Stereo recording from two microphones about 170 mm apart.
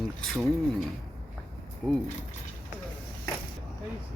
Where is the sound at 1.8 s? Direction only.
10° right (ahead or behind).